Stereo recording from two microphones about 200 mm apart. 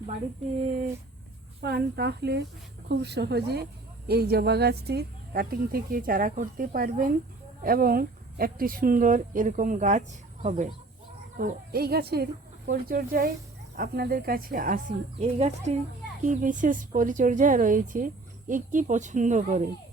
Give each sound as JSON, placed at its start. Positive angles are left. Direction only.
{"t": 1.6, "sound": "speech", "side_deg": -55}
{"t": 11.3, "sound": "a woman's voice", "side_deg": -45}